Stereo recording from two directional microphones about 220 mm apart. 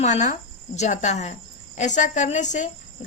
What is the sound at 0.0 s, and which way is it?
A woman's voice, 30° left (ahead or behind).